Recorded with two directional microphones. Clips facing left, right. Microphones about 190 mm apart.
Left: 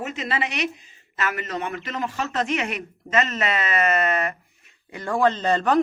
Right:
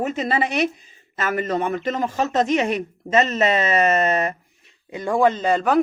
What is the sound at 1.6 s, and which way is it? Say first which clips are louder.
Speech: right 6 dB; 45° right (ahead or behind).